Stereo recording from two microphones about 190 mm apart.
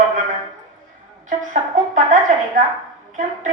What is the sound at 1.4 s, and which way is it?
A woman's voice, 45° right (ahead or behind).